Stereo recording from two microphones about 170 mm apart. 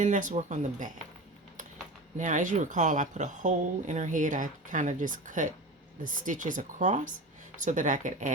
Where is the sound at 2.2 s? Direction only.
50° right (ahead or behind).